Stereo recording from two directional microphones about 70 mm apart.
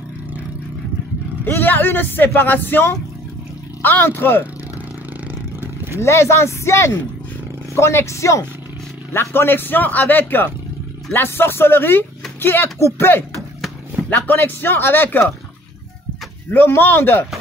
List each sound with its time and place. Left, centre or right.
1.4 s a man's voice: left
5.9 s speech: left
14.0 s a man's voice: left
16.4 s speech: left